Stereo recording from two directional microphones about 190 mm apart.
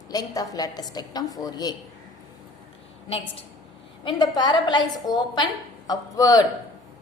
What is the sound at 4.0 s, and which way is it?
A woman's voice, 25° left (ahead or behind).